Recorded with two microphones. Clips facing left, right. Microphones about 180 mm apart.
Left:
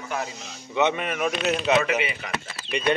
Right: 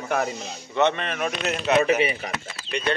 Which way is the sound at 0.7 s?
5° left (ahead or behind).